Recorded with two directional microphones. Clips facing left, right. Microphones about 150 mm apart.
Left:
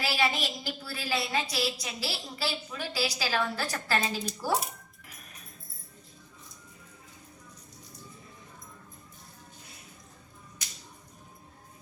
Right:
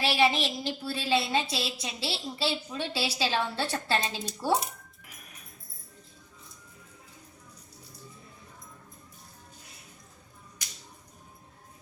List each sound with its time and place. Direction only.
0.0 s a woman's voice: 25° right (ahead or behind)